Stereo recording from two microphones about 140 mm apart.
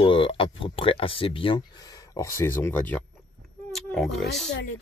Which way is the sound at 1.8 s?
25° left (ahead or behind).